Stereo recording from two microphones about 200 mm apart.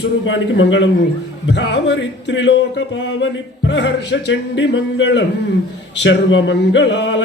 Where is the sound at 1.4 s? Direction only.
60° left (ahead or behind).